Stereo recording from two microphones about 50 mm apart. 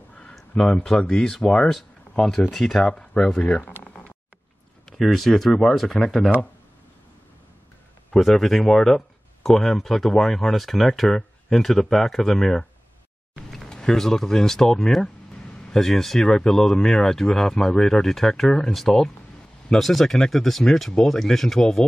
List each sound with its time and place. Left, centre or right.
0.1 s a sound: centre
0.8 s speech: centre
1.7 s speech: centre
4.9 s speech: centre
8.2 s speech: centre